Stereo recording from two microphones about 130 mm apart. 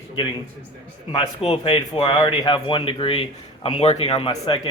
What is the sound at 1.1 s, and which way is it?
Speech, 45° left (ahead or behind).